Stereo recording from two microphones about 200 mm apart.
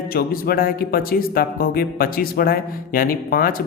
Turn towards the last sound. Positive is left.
turn(degrees=45)  # may be behind; listen again after turning